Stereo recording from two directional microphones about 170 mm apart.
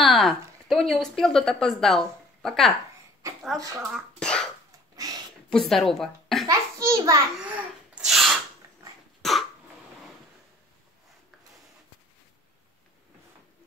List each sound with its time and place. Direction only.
0.0 s a woman's voice: centre (ahead or behind)
3.9 s cough: 5° left (ahead or behind)
4.9 s a sound: 20° right (ahead or behind)
5.5 s a woman's voice: centre (ahead or behind)
6.4 s a sound: 20° right (ahead or behind)
7.3 s sneeze: 5° right (ahead or behind)
9.2 s cough: centre (ahead or behind)